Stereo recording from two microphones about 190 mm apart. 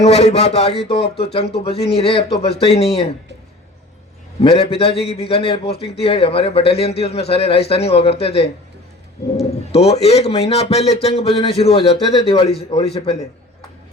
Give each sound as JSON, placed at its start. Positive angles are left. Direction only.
{"t": 0.0, "sound": "speech", "side_deg": 35}
{"t": 4.4, "sound": "a man's voice", "side_deg": 30}
{"t": 9.7, "sound": "a man's voice", "side_deg": 35}